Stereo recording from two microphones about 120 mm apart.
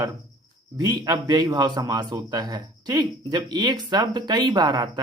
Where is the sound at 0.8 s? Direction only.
35° right (ahead or behind).